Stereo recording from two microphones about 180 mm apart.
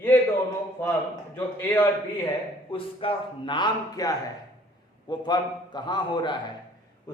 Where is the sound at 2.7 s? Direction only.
30° left (ahead or behind).